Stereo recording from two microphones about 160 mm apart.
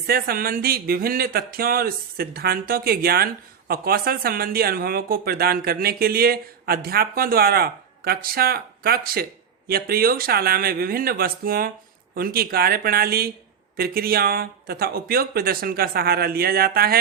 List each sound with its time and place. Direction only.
0.1 s speech: 65° right (ahead or behind)